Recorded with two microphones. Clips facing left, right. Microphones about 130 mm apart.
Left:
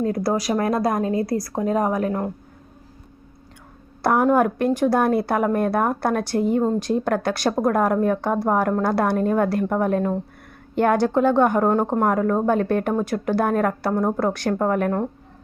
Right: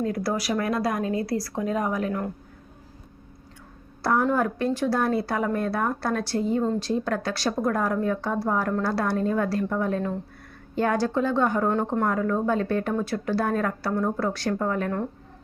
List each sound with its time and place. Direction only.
0.0 s speech: 40° left (ahead or behind)
4.0 s a woman's voice: 55° left (ahead or behind)